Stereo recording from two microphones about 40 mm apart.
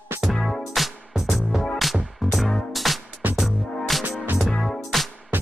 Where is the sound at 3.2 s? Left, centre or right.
Right.